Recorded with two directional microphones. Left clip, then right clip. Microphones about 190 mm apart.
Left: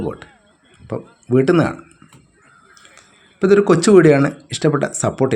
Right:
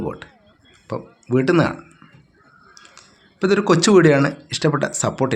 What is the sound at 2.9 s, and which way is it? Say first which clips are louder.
Speech: left 1 dB; 15° left (ahead or behind).